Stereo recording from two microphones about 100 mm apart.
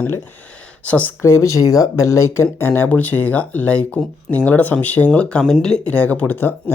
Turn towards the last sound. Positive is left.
turn(degrees=20)  # may be behind; listen again after turning